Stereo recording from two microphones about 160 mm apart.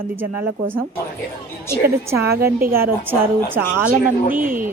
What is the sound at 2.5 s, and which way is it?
Speech, 65° right (ahead or behind).